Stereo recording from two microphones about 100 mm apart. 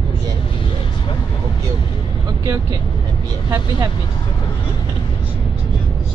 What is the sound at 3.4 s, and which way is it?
Speech, 40° right (ahead or behind).